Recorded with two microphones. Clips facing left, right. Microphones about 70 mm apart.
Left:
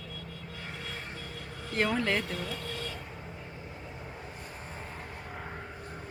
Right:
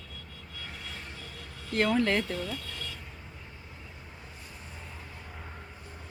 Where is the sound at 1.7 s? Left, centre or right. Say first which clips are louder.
Right 3 dB; centre.